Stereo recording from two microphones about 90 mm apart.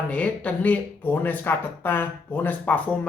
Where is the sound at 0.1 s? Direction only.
15° left (ahead or behind).